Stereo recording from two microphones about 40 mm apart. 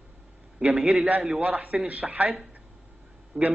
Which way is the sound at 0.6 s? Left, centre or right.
Right.